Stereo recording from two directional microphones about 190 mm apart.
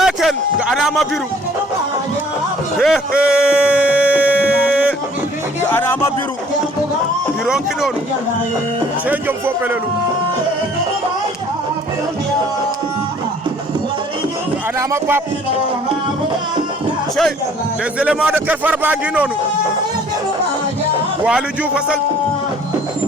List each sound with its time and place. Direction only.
0.0 s music: centre (ahead or behind)
2.7 s a sound: centre (ahead or behind)
5.6 s music: 10° left (ahead or behind)
7.4 s a man's voice: 5° right (ahead or behind)
9.0 s speech: 10° right (ahead or behind)
14.8 s speech: 15° right (ahead or behind)
18.0 s speech: 5° right (ahead or behind)
21.2 s a man's voice: 5° right (ahead or behind)